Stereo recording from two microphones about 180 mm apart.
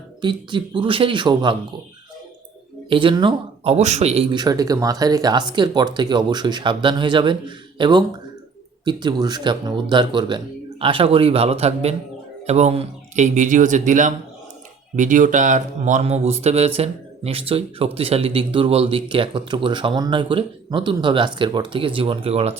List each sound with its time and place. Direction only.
0.2 s speech: 25° right (ahead or behind)
2.9 s speech: 25° right (ahead or behind)